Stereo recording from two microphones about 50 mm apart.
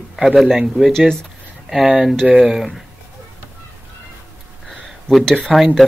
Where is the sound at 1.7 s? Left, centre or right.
Centre.